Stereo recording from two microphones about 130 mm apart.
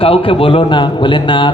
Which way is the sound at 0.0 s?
45° left (ahead or behind).